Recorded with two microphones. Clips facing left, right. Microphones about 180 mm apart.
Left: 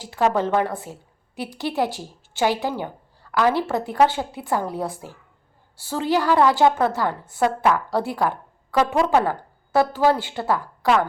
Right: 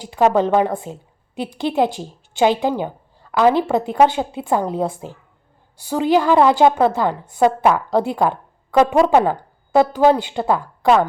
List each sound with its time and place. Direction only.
0.0 s a woman's voice: 20° right (ahead or behind)